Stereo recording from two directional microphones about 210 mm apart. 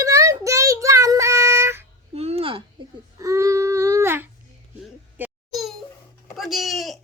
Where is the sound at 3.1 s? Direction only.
15° right (ahead or behind).